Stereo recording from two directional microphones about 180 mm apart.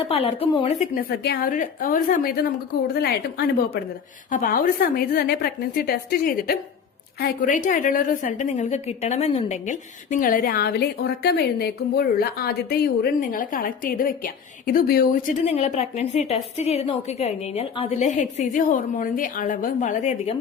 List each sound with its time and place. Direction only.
0.0 s a woman's voice: 35° left (ahead or behind)
0.9 s a woman's voice: 60° left (ahead or behind)
4.3 s a woman's voice: 50° left (ahead or behind)
15.4 s a woman's voice: 40° left (ahead or behind)